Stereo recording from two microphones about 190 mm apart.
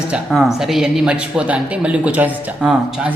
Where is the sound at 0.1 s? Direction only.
Centre (ahead or behind).